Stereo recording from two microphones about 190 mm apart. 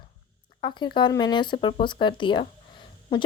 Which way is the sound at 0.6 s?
25° left (ahead or behind).